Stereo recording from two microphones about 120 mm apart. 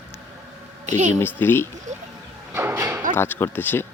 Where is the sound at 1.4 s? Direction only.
15° left (ahead or behind).